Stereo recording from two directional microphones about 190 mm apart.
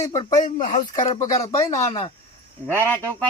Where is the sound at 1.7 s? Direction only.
30° left (ahead or behind).